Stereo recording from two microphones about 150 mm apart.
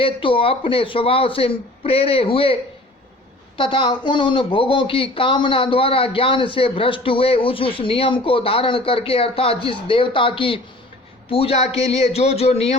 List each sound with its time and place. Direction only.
0.0 s speech: 35° left (ahead or behind)
3.6 s a man's voice: 35° left (ahead or behind)